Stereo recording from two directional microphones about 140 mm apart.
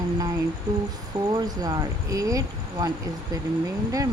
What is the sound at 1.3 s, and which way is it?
Speech, 30° right (ahead or behind).